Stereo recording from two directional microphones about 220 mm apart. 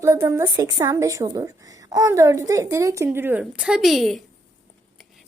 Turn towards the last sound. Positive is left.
turn(degrees=0)  # may be behind; listen again after turning